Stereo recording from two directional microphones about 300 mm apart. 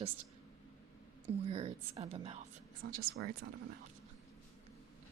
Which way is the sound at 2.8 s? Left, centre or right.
Right.